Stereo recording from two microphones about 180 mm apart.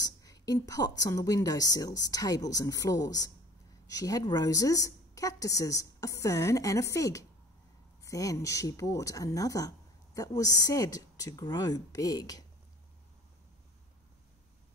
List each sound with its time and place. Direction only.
0.0 s speech: 20° left (ahead or behind)